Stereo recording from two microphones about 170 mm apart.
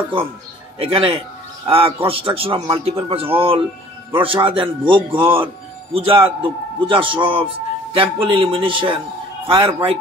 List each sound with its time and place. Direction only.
0.7 s a man's voice: 30° right (ahead or behind)